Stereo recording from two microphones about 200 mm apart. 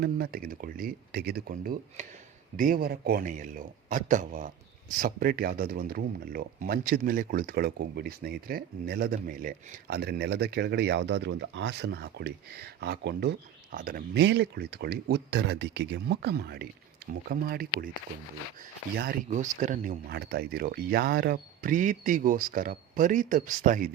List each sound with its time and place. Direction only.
0.0 s speech: 50° right (ahead or behind)
19.3 s speech: 40° right (ahead or behind)